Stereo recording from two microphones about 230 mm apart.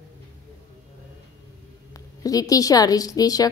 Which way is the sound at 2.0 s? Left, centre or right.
Centre.